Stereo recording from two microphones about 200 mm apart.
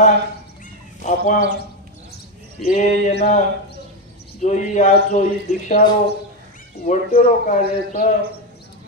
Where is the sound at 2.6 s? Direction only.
35° left (ahead or behind).